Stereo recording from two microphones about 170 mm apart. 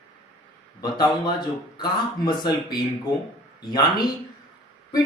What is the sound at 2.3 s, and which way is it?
A man's voice, 25° left (ahead or behind).